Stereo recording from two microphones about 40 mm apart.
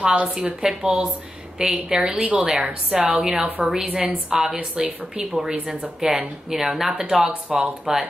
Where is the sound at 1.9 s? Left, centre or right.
Centre.